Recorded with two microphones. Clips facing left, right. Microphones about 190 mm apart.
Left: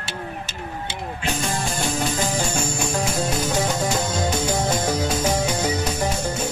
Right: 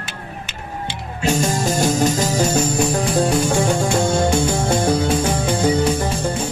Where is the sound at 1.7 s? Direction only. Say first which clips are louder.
Right 9 dB; 40° right (ahead or behind).